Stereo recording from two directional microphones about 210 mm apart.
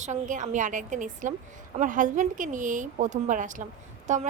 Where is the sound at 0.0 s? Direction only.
35° right (ahead or behind).